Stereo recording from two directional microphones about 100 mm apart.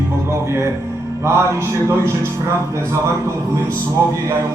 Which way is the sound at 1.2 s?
25° right (ahead or behind).